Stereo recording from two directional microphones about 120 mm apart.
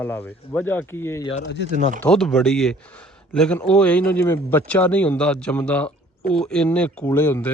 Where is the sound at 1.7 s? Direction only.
90° right.